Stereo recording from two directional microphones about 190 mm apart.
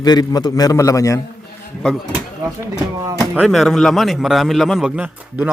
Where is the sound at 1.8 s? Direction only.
Centre (ahead or behind).